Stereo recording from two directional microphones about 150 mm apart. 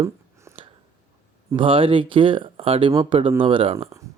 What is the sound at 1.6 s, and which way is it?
Speech, 35° right (ahead or behind).